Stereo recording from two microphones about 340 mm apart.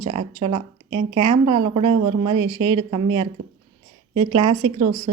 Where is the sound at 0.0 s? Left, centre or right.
Right.